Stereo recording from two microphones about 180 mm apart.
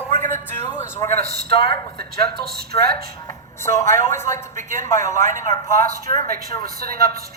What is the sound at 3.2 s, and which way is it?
A woman's voice, 15° left (ahead or behind).